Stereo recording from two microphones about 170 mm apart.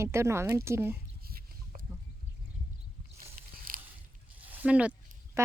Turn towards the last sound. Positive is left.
turn(degrees=-10)  # may be behind; listen again after turning